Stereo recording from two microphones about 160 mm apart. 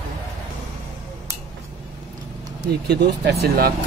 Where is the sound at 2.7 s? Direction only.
90° right.